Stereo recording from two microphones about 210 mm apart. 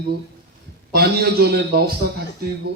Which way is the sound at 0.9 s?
50° right (ahead or behind).